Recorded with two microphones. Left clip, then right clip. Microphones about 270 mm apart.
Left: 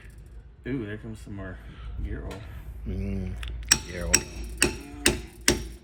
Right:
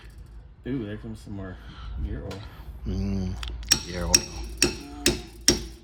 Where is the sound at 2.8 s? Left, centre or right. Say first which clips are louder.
Right 3 dB; centre.